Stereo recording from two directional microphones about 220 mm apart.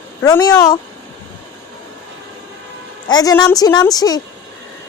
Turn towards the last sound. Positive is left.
turn(degrees=15)  # may be behind; listen again after turning